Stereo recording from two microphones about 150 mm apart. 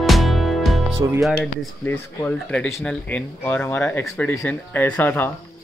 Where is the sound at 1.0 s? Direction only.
20° right (ahead or behind).